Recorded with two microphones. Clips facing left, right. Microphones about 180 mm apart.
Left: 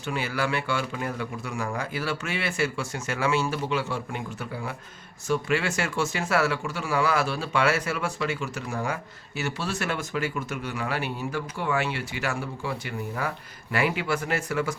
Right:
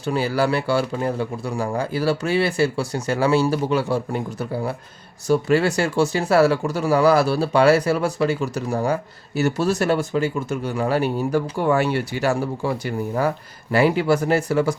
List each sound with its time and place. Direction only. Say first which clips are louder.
0.0 s speech: right 8 dB; 35° right (ahead or behind)